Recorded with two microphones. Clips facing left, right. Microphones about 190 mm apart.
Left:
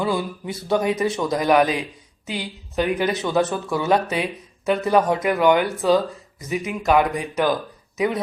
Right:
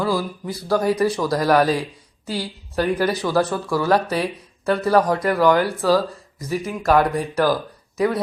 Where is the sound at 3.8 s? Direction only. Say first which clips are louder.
Right 1 dB; 20° left (ahead or behind).